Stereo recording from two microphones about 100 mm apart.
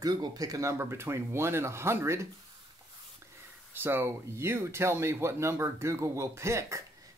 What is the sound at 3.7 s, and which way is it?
Speech, 20° right (ahead or behind).